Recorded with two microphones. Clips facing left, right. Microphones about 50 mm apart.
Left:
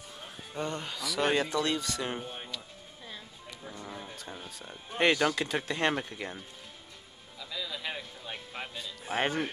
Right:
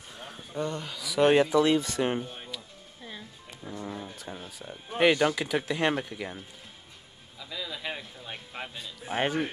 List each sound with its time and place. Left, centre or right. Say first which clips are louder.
0.6 s speech: right 2 dB; centre
1.1 s speech: right 7 dB; centre
1.8 s speech: right 6 dB; right
2.2 s music: left 1 dB; centre
3.7 s music: right 7 dB; centre
4.6 s speech: right 4 dB; centre
7.3 s music: right 1 dB; centre